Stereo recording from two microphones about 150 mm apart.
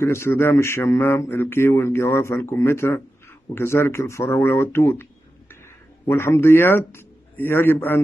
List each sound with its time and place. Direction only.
0.0 s speech: 15° left (ahead or behind)
6.0 s a man's voice: 15° left (ahead or behind)